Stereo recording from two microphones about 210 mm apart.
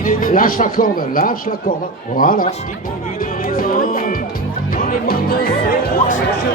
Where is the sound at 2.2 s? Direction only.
40° left (ahead or behind).